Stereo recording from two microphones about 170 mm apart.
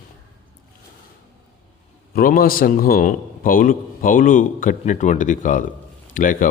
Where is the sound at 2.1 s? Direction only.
60° left (ahead or behind).